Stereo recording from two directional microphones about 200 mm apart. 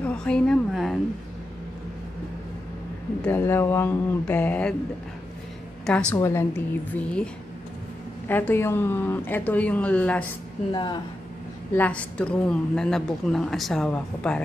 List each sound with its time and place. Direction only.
0.0 s a woman's voice: 5° left (ahead or behind)
3.3 s a woman's voice: 10° left (ahead or behind)
5.9 s a woman's voice: 5° left (ahead or behind)
8.3 s a woman's voice: 10° left (ahead or behind)
10.7 s speech: 20° left (ahead or behind)
11.7 s a woman's voice: 5° left (ahead or behind)